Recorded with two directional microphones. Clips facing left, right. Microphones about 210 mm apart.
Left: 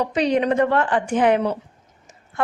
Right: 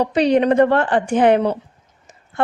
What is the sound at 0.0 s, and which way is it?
A woman's voice, 35° right (ahead or behind).